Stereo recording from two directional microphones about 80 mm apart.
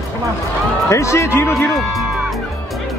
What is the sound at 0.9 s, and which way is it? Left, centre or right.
Speech, left.